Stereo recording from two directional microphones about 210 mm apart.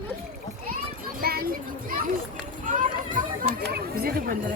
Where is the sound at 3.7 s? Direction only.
45° right (ahead or behind).